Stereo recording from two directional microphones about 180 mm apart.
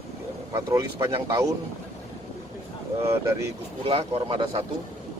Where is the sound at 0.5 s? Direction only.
20° right (ahead or behind).